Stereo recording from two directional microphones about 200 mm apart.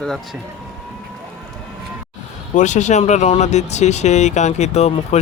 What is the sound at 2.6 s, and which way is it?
Speech, 35° left (ahead or behind).